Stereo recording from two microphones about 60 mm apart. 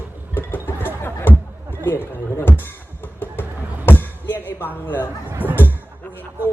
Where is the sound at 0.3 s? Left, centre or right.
Left.